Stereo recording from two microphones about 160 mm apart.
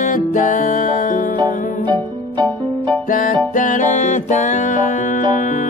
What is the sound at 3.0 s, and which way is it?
Music, 60° left (ahead or behind).